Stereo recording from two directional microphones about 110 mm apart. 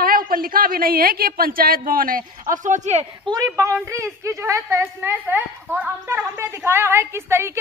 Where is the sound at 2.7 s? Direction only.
90° right.